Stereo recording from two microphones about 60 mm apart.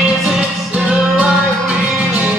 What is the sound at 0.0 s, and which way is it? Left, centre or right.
Music, centre.